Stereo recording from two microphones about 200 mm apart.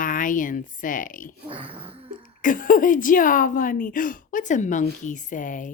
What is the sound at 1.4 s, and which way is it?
Speech, 25° right (ahead or behind).